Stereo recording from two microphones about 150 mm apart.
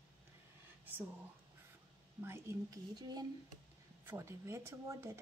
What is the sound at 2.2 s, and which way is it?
A woman's voice, 20° right (ahead or behind).